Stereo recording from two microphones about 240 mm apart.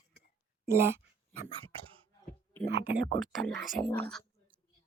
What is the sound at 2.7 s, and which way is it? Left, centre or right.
Speech, right.